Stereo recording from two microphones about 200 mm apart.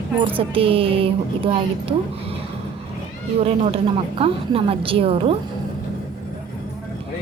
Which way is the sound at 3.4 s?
30° right (ahead or behind).